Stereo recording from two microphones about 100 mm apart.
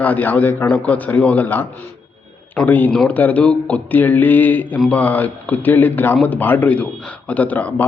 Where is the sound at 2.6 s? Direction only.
15° left (ahead or behind).